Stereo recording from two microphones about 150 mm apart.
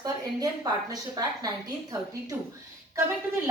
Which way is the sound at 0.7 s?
25° right (ahead or behind).